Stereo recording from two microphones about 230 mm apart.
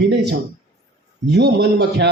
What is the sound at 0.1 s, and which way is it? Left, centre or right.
Speech, right.